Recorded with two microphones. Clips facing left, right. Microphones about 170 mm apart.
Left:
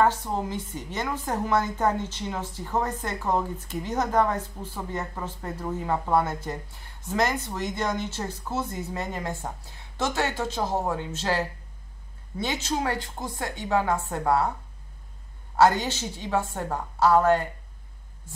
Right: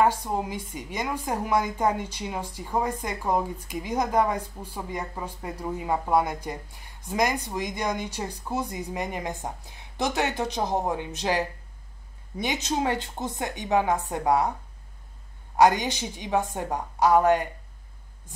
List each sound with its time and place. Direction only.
0.0 s a woman's voice: 10° right (ahead or behind)
15.5 s a woman's voice: 15° right (ahead or behind)